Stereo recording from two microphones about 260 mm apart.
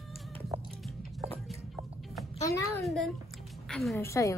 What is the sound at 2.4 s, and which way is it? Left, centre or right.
Speech, centre.